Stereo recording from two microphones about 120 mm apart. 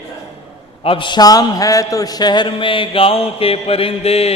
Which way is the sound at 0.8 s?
45° left (ahead or behind).